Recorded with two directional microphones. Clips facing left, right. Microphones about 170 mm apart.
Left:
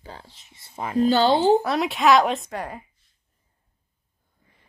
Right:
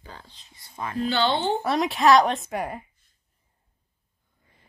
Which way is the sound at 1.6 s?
Centre (ahead or behind).